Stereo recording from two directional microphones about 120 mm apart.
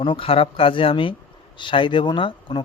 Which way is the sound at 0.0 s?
45° left (ahead or behind).